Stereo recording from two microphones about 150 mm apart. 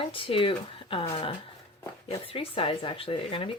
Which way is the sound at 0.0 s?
35° left (ahead or behind).